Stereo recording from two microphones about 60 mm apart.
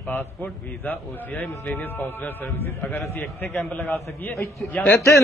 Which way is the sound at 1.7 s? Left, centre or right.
Left.